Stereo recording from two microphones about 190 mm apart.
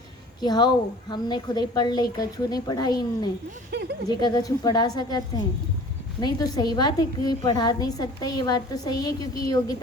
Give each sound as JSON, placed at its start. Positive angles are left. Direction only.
{"t": 0.4, "sound": "a woman's voice", "side_deg": 20}
{"t": 3.7, "sound": "speech", "side_deg": -65}
{"t": 4.2, "sound": "a woman's voice", "side_deg": 20}